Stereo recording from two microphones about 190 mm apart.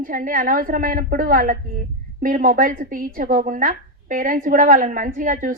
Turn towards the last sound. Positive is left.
turn(degrees=-45)  # may be behind; listen again after turning